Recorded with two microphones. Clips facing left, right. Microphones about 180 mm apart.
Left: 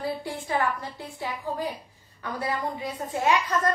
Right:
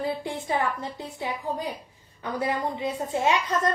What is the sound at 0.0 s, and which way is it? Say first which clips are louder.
A child's voice: right 2 dB; 20° right (ahead or behind).